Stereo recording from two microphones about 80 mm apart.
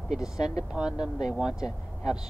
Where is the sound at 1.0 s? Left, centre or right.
Centre.